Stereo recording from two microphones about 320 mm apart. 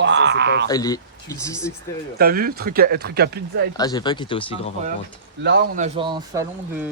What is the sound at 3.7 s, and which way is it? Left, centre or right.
Speech, centre.